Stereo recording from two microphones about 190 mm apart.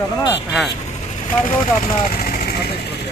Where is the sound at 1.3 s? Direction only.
45° left (ahead or behind).